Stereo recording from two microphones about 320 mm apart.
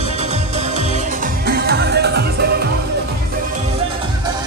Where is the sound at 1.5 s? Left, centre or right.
Right.